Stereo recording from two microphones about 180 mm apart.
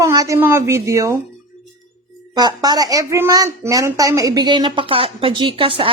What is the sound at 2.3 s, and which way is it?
A woman's voice, 20° right (ahead or behind).